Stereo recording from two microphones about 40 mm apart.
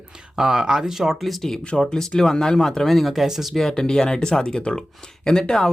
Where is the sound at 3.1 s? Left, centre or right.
Centre.